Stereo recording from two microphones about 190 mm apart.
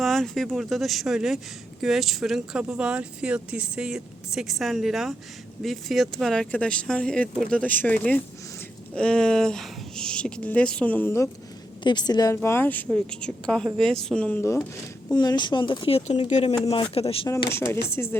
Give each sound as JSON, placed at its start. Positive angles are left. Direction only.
{"t": 0.0, "sound": "speech", "side_deg": 0}
{"t": 11.8, "sound": "a woman's voice", "side_deg": 25}
{"t": 17.2, "sound": "a woman's voice", "side_deg": 15}